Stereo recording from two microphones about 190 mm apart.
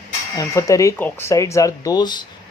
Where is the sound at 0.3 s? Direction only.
15° left (ahead or behind).